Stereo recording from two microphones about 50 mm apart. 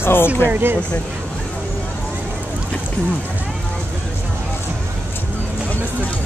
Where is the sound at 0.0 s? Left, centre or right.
Left.